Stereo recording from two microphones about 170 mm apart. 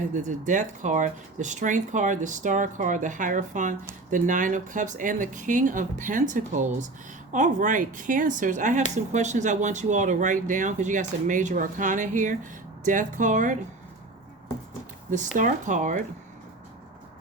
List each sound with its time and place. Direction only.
0.1 s speech: 45° right (ahead or behind)
15.1 s speech: 45° right (ahead or behind)